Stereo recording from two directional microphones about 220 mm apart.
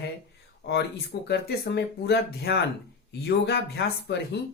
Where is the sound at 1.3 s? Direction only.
50° left (ahead or behind).